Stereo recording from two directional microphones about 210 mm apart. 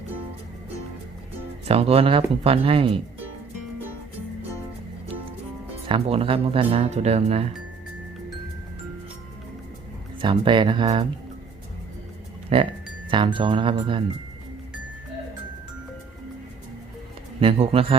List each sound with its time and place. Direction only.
1.6 s speech: 30° right (ahead or behind)
5.9 s speech: 25° right (ahead or behind)
10.2 s speech: 25° right (ahead or behind)
12.5 s speech: 25° right (ahead or behind)
17.4 s speech: 25° right (ahead or behind)